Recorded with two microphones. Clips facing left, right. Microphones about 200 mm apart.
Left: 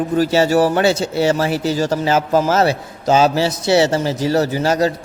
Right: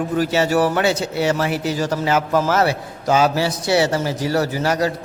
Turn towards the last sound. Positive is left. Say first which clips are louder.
# left 3 dB
turn(degrees=25)  # may be behind; listen again after turning